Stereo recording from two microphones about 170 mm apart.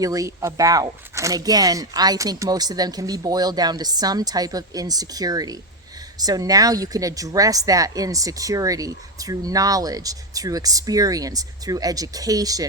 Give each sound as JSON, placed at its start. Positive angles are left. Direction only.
{"t": 0.0, "sound": "speech", "side_deg": -20}